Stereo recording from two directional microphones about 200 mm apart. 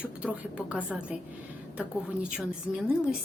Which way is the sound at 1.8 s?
5° right (ahead or behind).